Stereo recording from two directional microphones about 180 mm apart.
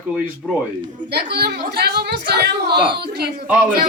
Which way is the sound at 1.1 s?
65° right (ahead or behind).